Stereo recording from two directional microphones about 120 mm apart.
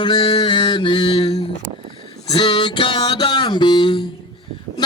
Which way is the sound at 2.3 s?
40° left (ahead or behind).